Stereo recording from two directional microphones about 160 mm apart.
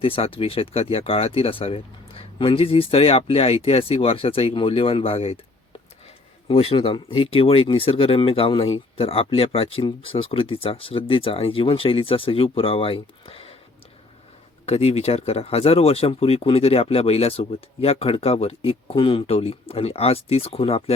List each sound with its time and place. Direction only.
0.0 s speech: 35° left (ahead or behind)
6.5 s speech: 40° left (ahead or behind)
14.7 s speech: 40° left (ahead or behind)